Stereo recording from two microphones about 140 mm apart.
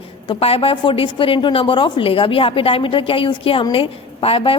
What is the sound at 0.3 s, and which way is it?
A woman's voice, 45° left (ahead or behind).